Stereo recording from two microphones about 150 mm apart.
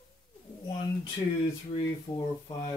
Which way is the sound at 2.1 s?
25° left (ahead or behind).